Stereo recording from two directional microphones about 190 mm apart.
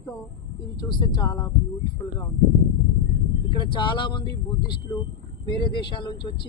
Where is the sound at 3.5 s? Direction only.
25° left (ahead or behind).